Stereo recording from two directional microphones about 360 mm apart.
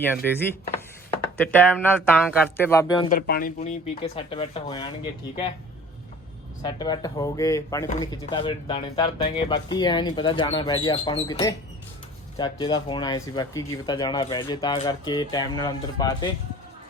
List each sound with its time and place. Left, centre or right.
1.4 s speech: centre
3.1 s speech: left
6.6 s speech: centre